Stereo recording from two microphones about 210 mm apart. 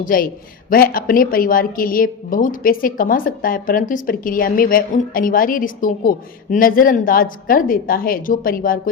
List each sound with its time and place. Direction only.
0.0 s a man's voice: 40° left (ahead or behind)